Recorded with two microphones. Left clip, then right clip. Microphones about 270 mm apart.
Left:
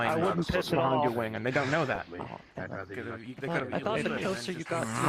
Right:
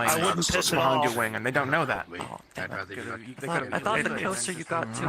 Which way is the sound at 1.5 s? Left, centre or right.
Right.